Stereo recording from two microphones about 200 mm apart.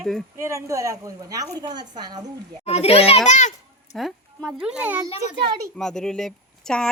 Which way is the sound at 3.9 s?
Centre (ahead or behind).